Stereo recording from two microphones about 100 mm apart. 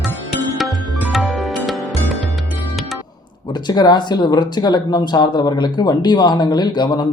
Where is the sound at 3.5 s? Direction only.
45° left (ahead or behind).